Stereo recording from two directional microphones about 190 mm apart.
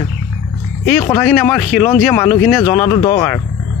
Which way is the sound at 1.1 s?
5° left (ahead or behind).